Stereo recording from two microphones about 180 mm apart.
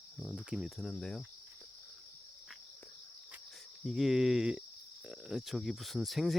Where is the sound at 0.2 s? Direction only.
5° right (ahead or behind).